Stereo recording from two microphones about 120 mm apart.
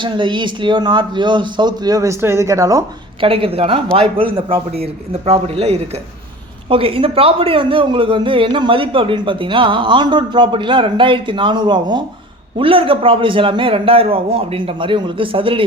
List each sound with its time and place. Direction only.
0.0 s a man's voice: 40° right (ahead or behind)
3.2 s a man's voice: 50° right (ahead or behind)
6.7 s speech: 50° right (ahead or behind)
12.5 s speech: 50° right (ahead or behind)